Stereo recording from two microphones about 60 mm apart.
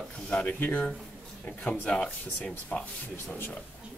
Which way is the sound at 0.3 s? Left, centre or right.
Left.